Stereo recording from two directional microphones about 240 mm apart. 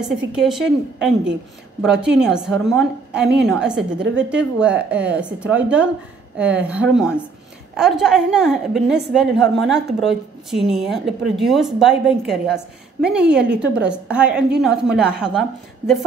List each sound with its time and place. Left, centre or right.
0.3 s a woman's voice: centre